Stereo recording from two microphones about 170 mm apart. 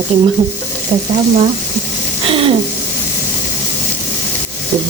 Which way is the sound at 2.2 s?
35° right (ahead or behind).